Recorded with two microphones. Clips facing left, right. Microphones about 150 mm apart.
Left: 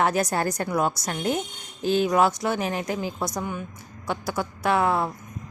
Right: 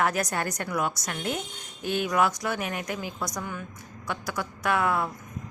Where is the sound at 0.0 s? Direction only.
25° left (ahead or behind).